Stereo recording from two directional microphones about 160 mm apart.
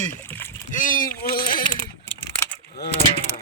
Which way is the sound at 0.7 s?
55° left (ahead or behind).